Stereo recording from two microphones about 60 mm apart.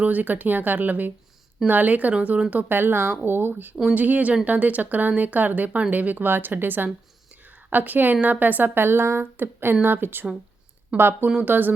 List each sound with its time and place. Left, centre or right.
0.0 s speech: right